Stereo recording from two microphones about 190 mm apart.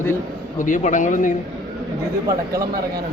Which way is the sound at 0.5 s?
40° left (ahead or behind).